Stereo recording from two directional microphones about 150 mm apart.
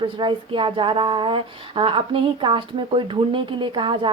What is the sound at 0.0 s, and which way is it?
Speech, 35° right (ahead or behind).